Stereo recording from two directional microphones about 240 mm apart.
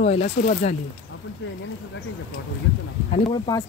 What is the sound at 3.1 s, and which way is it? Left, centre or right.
Speech, centre.